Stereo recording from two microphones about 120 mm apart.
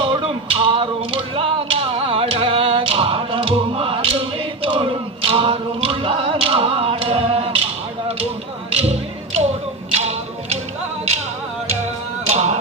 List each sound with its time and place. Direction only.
0.0 s music: 50° right (ahead or behind)
8.7 s tap: 60° right (ahead or behind)
9.9 s music: 60° right (ahead or behind)
12.3 s a sound: 65° right (ahead or behind)